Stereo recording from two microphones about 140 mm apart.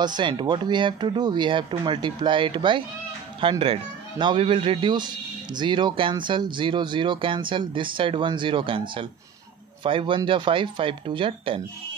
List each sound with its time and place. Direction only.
0.0 s speech: 35° right (ahead or behind)